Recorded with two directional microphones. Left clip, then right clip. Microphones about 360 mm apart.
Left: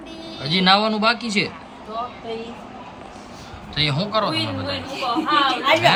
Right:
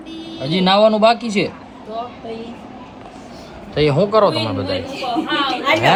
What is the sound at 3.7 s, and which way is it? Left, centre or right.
Speech, centre.